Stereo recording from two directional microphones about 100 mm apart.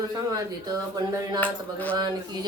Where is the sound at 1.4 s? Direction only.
15° left (ahead or behind).